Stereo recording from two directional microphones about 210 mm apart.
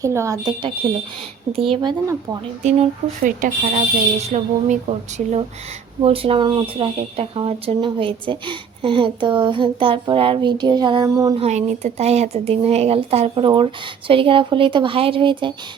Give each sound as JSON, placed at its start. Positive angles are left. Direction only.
{"t": 0.0, "sound": "speech", "side_deg": -15}
{"t": 2.6, "sound": "speech", "side_deg": -30}
{"t": 11.3, "sound": "speech", "side_deg": -30}